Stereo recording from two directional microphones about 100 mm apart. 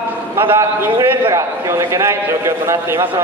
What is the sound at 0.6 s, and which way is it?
A man's voice, 30° right (ahead or behind).